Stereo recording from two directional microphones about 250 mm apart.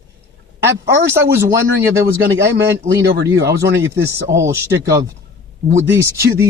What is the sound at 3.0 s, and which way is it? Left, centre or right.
Speech, right.